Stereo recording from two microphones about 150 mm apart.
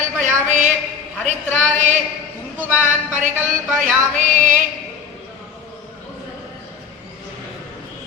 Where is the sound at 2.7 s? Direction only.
10° right (ahead or behind).